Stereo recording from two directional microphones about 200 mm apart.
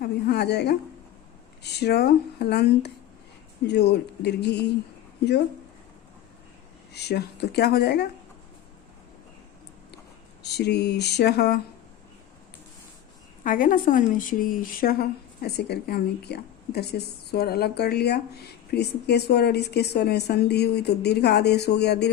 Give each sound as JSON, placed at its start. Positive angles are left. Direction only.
{"t": 0.0, "sound": "a woman's voice", "side_deg": 50}
{"t": 6.9, "sound": "speech", "side_deg": 55}
{"t": 10.4, "sound": "a woman's voice", "side_deg": 55}
{"t": 13.4, "sound": "a woman's voice", "side_deg": 40}